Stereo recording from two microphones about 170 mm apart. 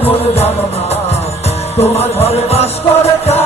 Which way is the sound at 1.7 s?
35° left (ahead or behind).